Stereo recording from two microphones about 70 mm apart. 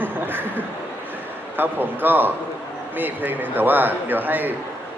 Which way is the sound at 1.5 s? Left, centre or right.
Right.